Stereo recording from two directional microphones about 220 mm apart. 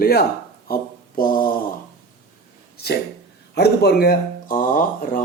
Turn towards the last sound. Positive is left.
turn(degrees=40)  # may be behind; listen again after turning